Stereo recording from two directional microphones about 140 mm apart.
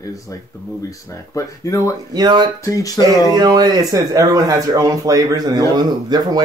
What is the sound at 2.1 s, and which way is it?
Speech, 30° right (ahead or behind).